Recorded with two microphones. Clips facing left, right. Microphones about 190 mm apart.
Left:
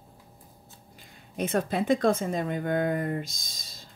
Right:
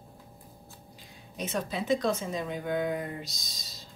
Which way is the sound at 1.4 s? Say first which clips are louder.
Left 6 dB; 55° left (ahead or behind).